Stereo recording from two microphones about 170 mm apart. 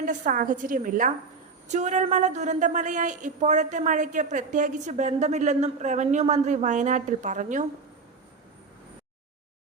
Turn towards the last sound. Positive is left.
turn(degrees=-45)  # may be behind; listen again after turning